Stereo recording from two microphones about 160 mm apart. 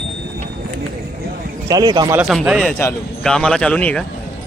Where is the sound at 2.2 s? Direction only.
5° right (ahead or behind).